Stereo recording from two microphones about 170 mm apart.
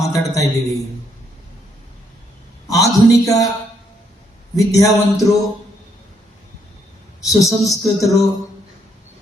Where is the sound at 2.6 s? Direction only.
20° left (ahead or behind).